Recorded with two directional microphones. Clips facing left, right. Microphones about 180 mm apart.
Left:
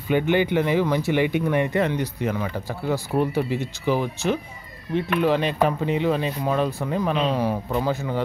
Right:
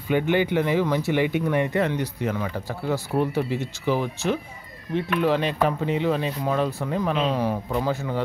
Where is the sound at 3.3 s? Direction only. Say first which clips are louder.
Left 1 dB; 15° left (ahead or behind).